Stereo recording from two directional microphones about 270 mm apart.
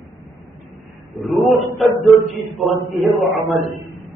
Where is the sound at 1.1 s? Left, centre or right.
Centre.